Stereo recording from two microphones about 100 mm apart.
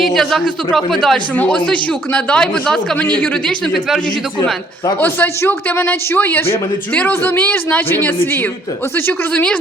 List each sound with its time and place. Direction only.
0.0 s a woman's voice: centre (ahead or behind)
4.9 s speech: 20° left (ahead or behind)